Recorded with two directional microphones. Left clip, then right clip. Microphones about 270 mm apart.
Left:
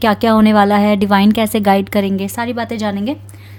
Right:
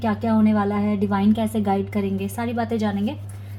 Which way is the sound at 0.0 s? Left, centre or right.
Left.